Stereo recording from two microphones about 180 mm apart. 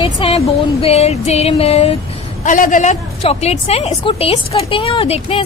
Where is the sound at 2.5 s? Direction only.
45° left (ahead or behind).